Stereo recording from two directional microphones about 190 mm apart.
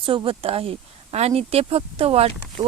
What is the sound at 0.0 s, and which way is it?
Speech, 30° right (ahead or behind).